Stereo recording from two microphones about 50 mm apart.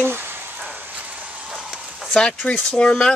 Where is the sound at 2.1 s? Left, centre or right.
Centre.